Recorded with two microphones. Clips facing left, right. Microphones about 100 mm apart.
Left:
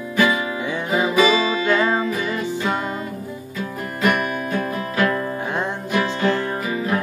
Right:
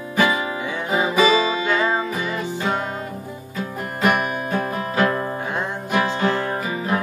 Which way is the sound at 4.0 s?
20° right (ahead or behind).